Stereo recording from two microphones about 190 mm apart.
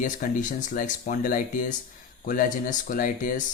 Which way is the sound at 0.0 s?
45° left (ahead or behind).